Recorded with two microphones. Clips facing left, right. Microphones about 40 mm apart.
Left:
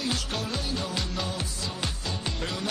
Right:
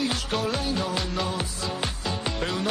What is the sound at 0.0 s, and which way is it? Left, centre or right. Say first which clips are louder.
Music: right 4 dB; centre.